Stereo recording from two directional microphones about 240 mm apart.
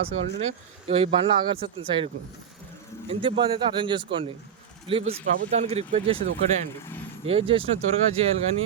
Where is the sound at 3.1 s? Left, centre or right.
Right.